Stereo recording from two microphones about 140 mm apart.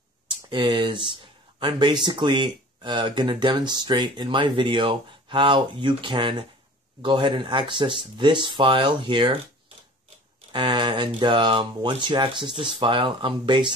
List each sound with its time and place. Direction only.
0.3 s speech: 35° right (ahead or behind)
10.5 s speech: 35° right (ahead or behind)